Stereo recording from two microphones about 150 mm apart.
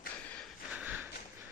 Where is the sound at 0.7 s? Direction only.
10° right (ahead or behind).